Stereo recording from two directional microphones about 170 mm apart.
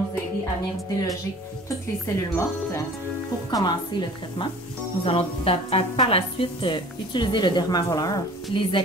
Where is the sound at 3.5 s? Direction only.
20° left (ahead or behind).